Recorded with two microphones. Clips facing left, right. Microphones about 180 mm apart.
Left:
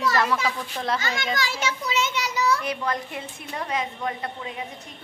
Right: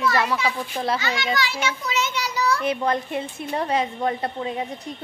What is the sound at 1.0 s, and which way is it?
Speech, 45° left (ahead or behind).